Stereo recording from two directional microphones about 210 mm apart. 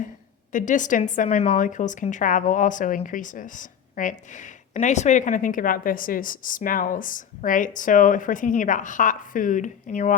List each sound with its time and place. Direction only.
0.5 s a woman's voice: 35° left (ahead or behind)